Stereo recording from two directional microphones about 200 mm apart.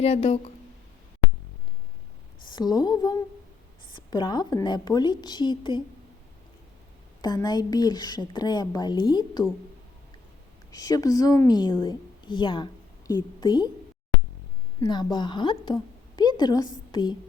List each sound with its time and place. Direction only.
0.0 s speech: 35° left (ahead or behind)
2.5 s a woman's voice: 20° left (ahead or behind)
7.2 s a woman's voice: 20° left (ahead or behind)
10.7 s a woman's voice: 15° left (ahead or behind)
14.8 s a woman's voice: 20° left (ahead or behind)